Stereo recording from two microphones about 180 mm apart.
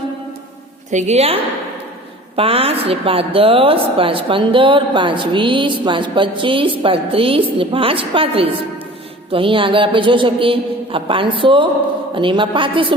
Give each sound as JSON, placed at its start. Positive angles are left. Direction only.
{"t": 0.9, "sound": "a woman's voice", "side_deg": -40}